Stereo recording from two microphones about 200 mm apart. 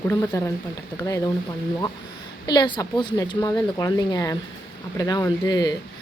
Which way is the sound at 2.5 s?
20° left (ahead or behind).